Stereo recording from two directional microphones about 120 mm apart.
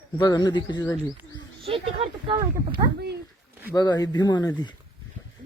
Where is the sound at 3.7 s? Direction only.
35° left (ahead or behind).